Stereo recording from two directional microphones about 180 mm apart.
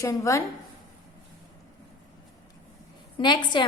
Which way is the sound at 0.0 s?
15° left (ahead or behind).